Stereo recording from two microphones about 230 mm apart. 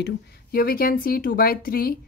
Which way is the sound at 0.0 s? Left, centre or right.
Left.